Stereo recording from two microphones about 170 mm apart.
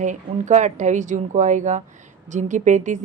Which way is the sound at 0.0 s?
45° right (ahead or behind).